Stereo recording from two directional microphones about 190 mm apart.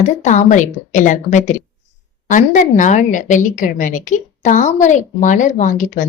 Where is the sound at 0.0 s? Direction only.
40° left (ahead or behind).